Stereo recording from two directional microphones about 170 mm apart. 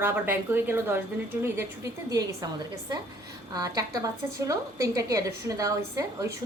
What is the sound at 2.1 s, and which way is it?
A woman's voice, 20° right (ahead or behind).